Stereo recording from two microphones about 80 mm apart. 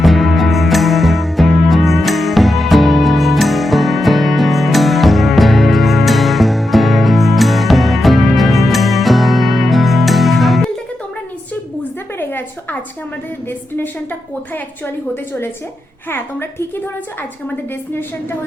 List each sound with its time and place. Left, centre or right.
0.0 s music: centre
13.7 s a woman's voice: left